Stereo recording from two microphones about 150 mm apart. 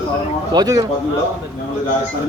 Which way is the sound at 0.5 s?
25° right (ahead or behind).